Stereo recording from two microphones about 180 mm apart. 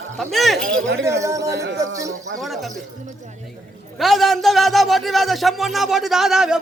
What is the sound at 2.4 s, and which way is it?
Speech, centre (ahead or behind).